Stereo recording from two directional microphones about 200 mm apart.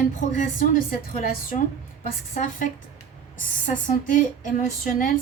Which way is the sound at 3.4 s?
40° left (ahead or behind).